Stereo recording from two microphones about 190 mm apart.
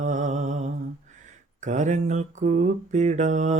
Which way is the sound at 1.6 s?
40° right (ahead or behind).